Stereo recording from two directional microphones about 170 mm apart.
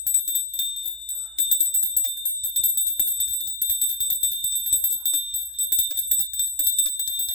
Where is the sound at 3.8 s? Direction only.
30° left (ahead or behind).